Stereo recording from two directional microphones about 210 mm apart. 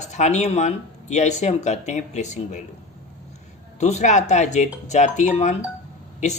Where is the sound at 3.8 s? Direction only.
35° left (ahead or behind).